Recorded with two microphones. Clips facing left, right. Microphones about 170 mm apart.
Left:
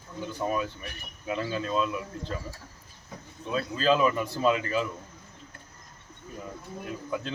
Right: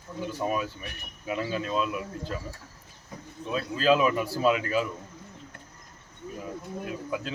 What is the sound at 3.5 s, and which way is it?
A man's voice, 5° right (ahead or behind).